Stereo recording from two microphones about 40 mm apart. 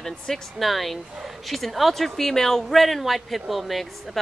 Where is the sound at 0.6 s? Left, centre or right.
Centre.